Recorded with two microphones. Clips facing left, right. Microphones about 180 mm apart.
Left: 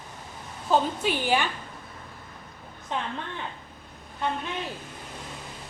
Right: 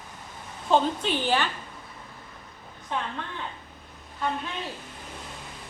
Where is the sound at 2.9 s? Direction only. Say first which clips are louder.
Even; 20° left (ahead or behind).